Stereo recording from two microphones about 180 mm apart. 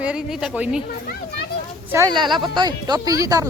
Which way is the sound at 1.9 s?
20° right (ahead or behind).